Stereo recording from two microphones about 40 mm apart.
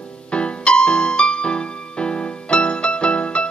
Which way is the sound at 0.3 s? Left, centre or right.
Left.